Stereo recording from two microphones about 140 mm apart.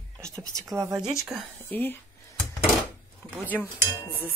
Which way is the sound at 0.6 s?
25° right (ahead or behind).